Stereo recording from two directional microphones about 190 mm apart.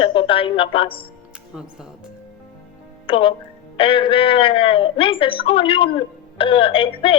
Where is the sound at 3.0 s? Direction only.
25° left (ahead or behind).